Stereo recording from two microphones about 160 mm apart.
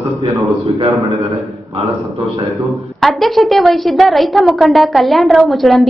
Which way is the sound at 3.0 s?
Centre (ahead or behind).